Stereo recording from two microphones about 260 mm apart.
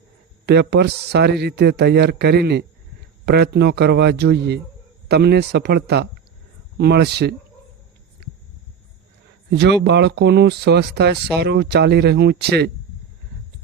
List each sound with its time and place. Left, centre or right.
0.4 s speech: right
9.5 s speech: right